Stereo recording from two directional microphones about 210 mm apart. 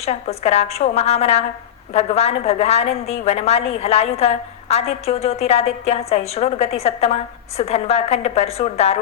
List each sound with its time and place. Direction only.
0.0 s a woman's voice: 30° left (ahead or behind)